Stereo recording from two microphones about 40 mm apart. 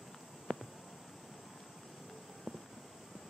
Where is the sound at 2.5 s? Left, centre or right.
Right.